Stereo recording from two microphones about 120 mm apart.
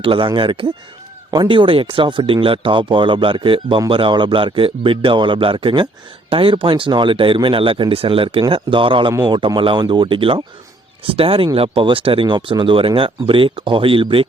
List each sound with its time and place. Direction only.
0.0 s speech: 45° right (ahead or behind)